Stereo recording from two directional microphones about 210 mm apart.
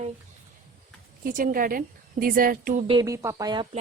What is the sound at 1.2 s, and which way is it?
A woman's voice, 40° right (ahead or behind).